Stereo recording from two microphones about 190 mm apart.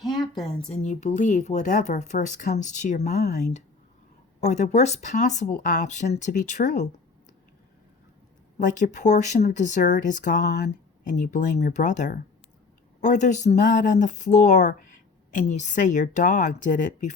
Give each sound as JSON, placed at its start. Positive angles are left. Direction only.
{"t": 0.7, "sound": "speech", "side_deg": 35}
{"t": 8.5, "sound": "a woman's voice", "side_deg": 40}